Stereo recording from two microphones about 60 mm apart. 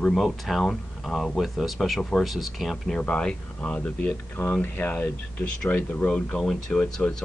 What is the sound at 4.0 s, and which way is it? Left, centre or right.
Speech, left.